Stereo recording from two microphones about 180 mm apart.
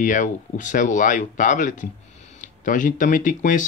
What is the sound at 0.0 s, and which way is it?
Speech, 45° left (ahead or behind).